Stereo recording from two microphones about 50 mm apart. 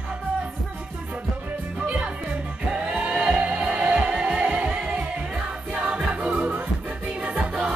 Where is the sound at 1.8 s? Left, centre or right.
Right.